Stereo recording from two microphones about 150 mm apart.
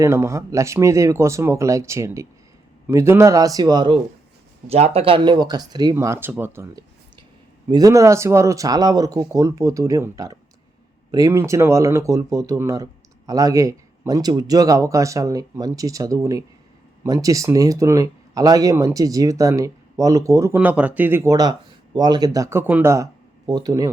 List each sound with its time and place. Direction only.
0.0 s speech: 20° right (ahead or behind)
4.7 s speech: 45° right (ahead or behind); by 23.9 s 25° right (ahead or behind)